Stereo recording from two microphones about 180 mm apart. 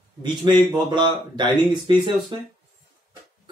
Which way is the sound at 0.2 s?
25° right (ahead or behind).